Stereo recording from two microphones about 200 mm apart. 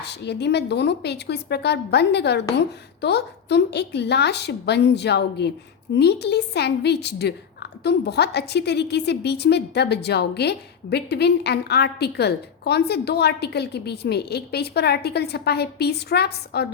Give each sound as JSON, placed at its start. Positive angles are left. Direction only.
{"t": 0.0, "sound": "a woman's voice", "side_deg": 55}